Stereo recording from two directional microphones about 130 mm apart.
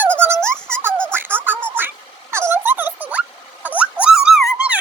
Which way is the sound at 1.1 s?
15° right (ahead or behind).